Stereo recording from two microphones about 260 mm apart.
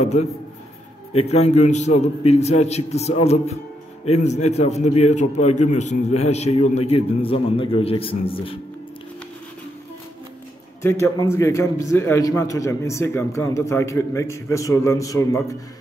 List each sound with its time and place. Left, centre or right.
0.0 s a man's voice: left
10.8 s a man's voice: centre